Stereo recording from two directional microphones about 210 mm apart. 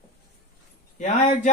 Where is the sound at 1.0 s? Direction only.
35° left (ahead or behind).